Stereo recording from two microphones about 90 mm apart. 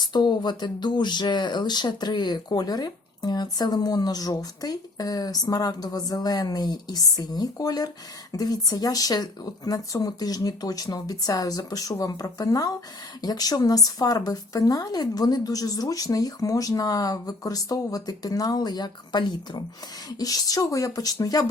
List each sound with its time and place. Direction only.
0.0 s speech: 55° left (ahead or behind)